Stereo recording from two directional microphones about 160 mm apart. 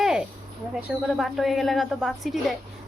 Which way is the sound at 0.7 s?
5° right (ahead or behind).